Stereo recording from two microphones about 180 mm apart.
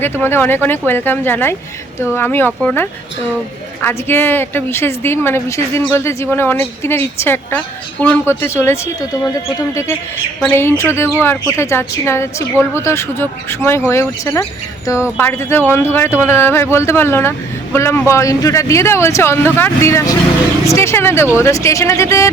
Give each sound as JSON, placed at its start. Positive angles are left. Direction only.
{"t": 0.0, "sound": "speech", "side_deg": 10}
{"t": 10.5, "sound": "speech", "side_deg": 15}